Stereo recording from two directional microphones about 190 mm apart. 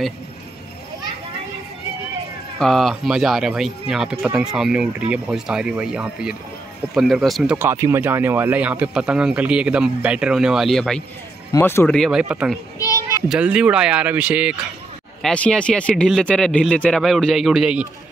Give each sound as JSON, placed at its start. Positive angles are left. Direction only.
{"t": 2.6, "sound": "speech", "side_deg": 0}
{"t": 7.5, "sound": "speech", "side_deg": -15}
{"t": 11.5, "sound": "speech", "side_deg": 10}
{"t": 15.2, "sound": "speech", "side_deg": 5}